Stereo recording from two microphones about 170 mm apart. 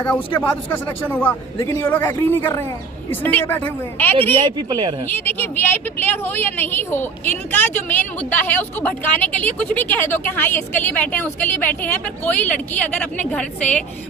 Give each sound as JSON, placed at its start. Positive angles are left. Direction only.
{"t": 0.0, "sound": "speech", "side_deg": 10}
{"t": 4.4, "sound": "speech", "side_deg": -25}
{"t": 5.0, "sound": "speech", "side_deg": 10}